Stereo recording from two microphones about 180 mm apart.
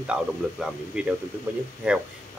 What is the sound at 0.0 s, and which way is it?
Speech, 5° right (ahead or behind).